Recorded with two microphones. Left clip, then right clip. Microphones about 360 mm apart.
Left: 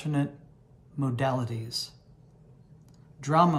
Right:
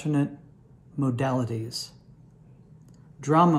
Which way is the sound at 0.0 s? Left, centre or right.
Centre.